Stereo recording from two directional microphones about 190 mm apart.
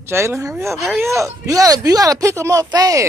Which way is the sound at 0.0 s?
15° right (ahead or behind).